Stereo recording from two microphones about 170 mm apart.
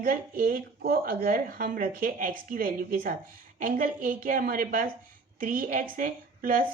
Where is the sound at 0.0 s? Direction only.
55° right (ahead or behind).